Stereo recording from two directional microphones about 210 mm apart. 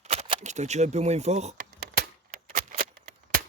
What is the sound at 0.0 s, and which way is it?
Speech, 30° right (ahead or behind).